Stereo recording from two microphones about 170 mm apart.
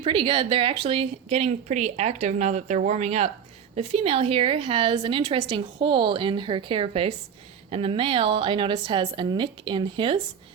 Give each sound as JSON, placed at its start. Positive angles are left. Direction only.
{"t": 0.0, "sound": "a woman's voice", "side_deg": -30}